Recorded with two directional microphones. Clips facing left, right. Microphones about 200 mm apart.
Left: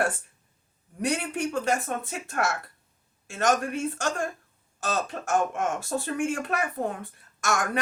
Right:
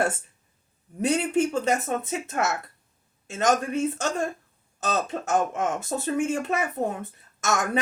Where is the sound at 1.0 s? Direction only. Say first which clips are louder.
Right 5 dB; 25° right (ahead or behind).